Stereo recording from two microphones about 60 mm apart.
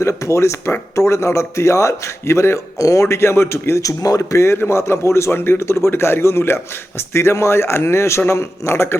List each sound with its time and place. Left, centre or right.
0.0 s a man's voice: left
3.8 s a man's voice: left